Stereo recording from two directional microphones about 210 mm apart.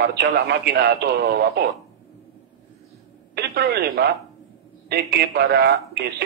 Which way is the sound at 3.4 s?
50° right (ahead or behind).